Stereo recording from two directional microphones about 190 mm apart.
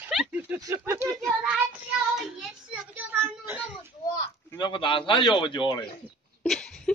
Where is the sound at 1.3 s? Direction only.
5° right (ahead or behind).